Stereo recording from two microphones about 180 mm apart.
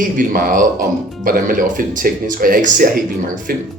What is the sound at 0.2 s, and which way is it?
Speech, 50° right (ahead or behind).